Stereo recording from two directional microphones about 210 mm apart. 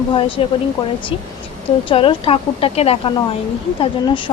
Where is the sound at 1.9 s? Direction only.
25° left (ahead or behind).